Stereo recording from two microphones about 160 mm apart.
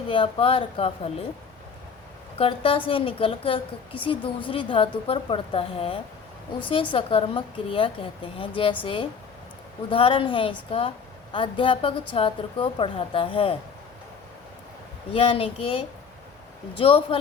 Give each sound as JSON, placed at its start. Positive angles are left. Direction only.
{"t": 0.1, "sound": "a woman's voice", "side_deg": 35}
{"t": 2.4, "sound": "a woman's voice", "side_deg": 35}
{"t": 15.1, "sound": "a woman's voice", "side_deg": 35}